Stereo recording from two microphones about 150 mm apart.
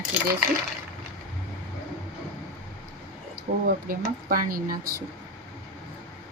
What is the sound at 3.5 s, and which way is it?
Speech, 70° right (ahead or behind).